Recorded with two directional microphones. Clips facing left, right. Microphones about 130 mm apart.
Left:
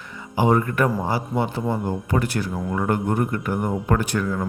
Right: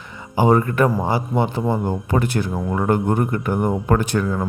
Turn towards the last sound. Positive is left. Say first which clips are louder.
# right 3 dB
turn(degrees=-30)  # may be behind; listen again after turning